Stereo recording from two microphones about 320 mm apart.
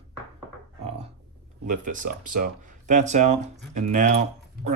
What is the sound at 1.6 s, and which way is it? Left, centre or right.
Speech, right.